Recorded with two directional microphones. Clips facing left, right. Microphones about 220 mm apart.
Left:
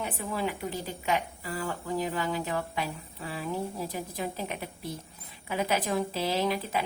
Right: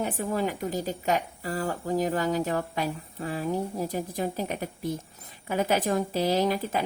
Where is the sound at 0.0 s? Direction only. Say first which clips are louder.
Right 4 dB; 45° right (ahead or behind).